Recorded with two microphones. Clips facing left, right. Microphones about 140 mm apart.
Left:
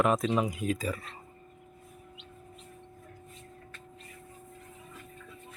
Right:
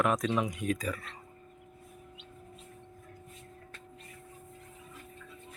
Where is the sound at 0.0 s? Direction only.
25° left (ahead or behind).